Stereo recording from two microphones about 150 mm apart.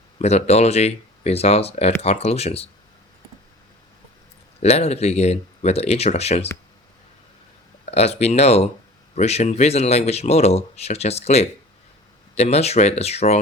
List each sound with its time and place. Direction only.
0.2 s speech: 45° left (ahead or behind)
4.6 s speech: 45° left (ahead or behind)
7.9 s speech: 45° left (ahead or behind)